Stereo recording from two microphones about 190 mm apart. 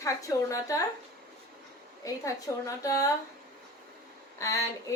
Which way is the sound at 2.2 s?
15° left (ahead or behind).